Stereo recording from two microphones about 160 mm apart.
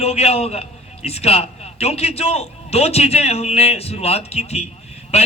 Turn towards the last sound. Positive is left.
turn(degrees=40)  # may be behind; listen again after turning